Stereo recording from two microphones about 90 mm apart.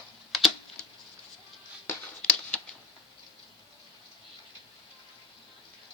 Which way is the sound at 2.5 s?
15° left (ahead or behind).